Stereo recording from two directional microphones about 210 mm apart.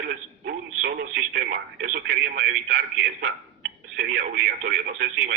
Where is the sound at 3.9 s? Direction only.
45° right (ahead or behind).